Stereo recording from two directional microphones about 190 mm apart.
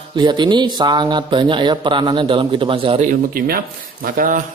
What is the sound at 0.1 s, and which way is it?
Speech, 25° right (ahead or behind).